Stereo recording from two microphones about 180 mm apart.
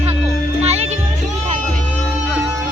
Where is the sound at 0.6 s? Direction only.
35° right (ahead or behind).